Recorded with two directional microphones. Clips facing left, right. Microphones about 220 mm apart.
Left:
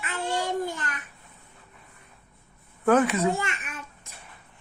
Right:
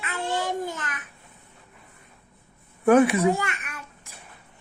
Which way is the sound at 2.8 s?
15° right (ahead or behind).